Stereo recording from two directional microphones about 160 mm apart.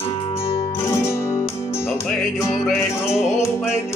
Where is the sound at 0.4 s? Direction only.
35° left (ahead or behind).